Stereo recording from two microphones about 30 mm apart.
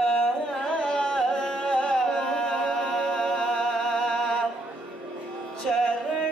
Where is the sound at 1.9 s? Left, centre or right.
Centre.